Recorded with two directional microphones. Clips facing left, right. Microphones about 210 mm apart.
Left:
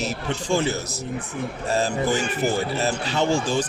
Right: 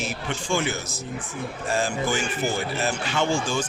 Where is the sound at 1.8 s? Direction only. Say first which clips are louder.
Left 3 dB; 35° left (ahead or behind).